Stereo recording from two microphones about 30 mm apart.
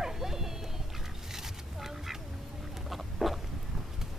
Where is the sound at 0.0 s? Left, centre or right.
Centre.